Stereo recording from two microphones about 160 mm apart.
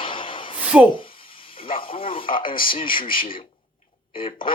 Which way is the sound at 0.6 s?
5° right (ahead or behind).